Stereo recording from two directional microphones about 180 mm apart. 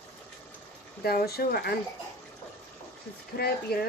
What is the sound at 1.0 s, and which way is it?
Speech, 60° left (ahead or behind).